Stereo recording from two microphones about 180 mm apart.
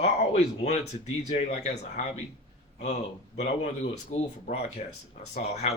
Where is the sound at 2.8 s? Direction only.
40° left (ahead or behind).